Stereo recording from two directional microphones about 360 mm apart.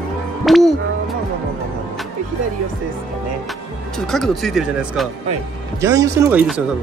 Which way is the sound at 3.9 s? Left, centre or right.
Centre.